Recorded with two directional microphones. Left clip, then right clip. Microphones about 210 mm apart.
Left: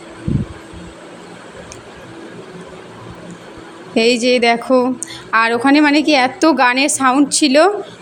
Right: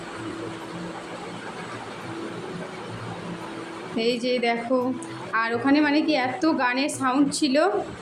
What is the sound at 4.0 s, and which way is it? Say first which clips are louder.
A woman's voice: left 11 dB; 40° left (ahead or behind).